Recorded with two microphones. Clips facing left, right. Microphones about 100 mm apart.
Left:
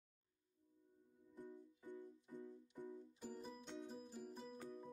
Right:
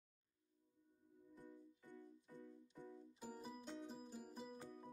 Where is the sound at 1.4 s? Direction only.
15° left (ahead or behind).